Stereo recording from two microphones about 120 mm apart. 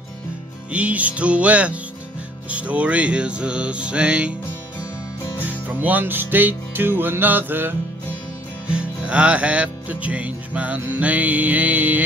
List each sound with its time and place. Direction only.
0.7 s music: 10° right (ahead or behind)
5.4 s music: 15° right (ahead or behind)